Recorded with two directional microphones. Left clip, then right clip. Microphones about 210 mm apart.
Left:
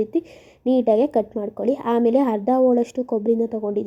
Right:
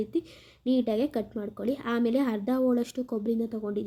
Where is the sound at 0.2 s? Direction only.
35° right (ahead or behind).